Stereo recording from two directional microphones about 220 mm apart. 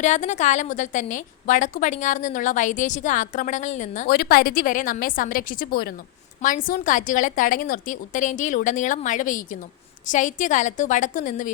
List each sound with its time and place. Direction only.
0.0 s a woman's voice: 35° left (ahead or behind)